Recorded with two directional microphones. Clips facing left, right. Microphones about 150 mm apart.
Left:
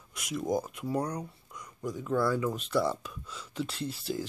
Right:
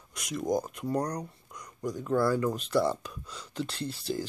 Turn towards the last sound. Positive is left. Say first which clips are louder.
# right 1 dB
turn(degrees=0)  # may be behind; listen again after turning